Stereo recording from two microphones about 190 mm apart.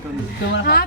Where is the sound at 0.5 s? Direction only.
55° left (ahead or behind).